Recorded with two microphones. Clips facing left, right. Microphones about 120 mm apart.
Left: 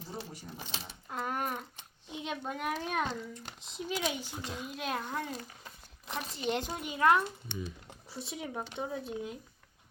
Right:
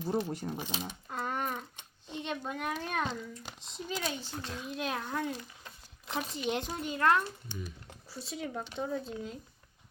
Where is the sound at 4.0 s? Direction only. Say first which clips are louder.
Left 2 dB; 15° left (ahead or behind).